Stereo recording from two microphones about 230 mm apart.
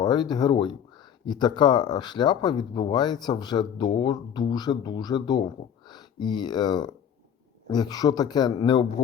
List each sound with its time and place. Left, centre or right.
0.0 s a man's voice: centre